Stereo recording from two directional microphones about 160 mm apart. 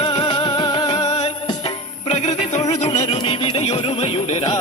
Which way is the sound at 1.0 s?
40° left (ahead or behind).